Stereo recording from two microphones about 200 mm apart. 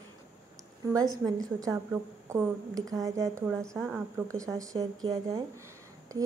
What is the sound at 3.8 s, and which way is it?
Speech, 5° right (ahead or behind).